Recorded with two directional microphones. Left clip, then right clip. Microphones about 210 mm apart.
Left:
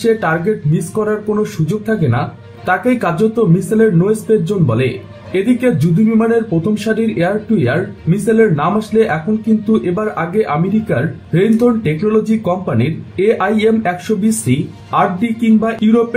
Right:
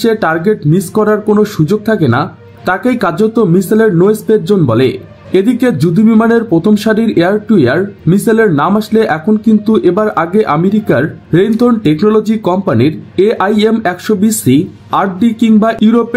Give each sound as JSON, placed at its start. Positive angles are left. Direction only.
{"t": 0.0, "sound": "speech", "side_deg": -55}